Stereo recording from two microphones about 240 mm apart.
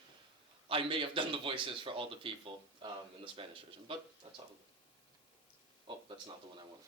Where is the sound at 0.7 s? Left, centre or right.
Right.